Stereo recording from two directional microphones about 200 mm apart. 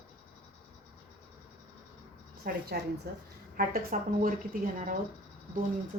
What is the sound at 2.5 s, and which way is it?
Speech, 45° right (ahead or behind).